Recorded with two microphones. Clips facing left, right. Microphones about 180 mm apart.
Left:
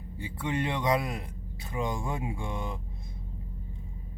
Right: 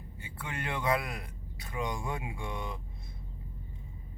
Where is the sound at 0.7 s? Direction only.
20° left (ahead or behind).